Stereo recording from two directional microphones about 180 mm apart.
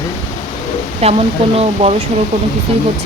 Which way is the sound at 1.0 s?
35° right (ahead or behind).